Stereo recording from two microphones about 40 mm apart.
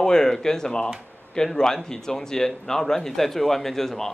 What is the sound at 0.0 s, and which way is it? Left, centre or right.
Speech, centre.